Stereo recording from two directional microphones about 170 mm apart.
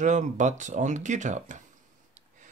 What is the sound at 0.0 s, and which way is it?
Speech, 45° right (ahead or behind).